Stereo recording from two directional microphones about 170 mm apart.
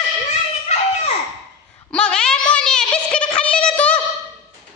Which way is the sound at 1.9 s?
5° left (ahead or behind).